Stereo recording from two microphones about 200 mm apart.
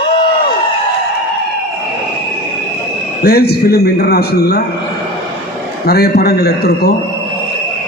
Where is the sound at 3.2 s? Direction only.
50° left (ahead or behind).